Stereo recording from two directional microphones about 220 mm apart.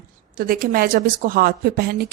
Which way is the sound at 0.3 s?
40° right (ahead or behind).